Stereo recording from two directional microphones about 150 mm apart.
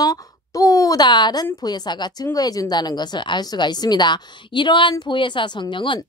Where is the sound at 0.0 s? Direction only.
25° left (ahead or behind).